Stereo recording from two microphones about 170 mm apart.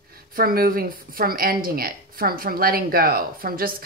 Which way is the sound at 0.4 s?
60° right (ahead or behind).